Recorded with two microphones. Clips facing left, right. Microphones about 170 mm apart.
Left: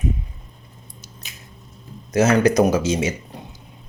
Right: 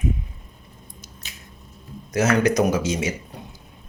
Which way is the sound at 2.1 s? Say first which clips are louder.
Left 3 dB; 30° left (ahead or behind).